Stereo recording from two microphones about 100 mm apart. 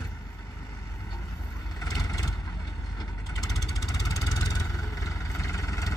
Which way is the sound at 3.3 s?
35° left (ahead or behind).